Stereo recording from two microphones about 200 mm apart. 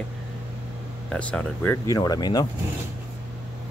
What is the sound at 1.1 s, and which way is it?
Speech, 10° left (ahead or behind).